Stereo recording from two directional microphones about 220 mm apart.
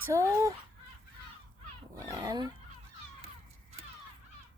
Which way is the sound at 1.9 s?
15° right (ahead or behind).